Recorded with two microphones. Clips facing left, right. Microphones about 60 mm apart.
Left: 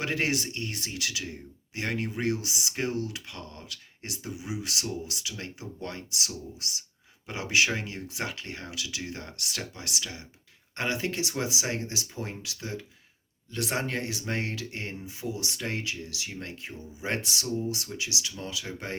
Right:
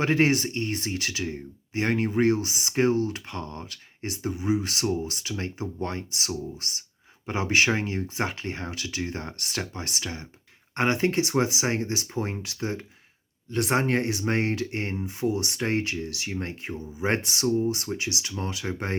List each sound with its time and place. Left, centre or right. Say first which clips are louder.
0.0 s speech: right 7 dB; right